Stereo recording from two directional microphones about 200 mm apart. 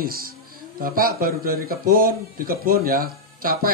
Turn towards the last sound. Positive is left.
turn(degrees=-50)  # may be behind; listen again after turning